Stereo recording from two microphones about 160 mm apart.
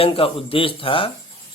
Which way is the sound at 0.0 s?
35° left (ahead or behind).